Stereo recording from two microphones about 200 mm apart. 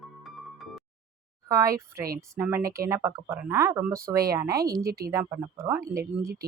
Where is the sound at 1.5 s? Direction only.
15° right (ahead or behind).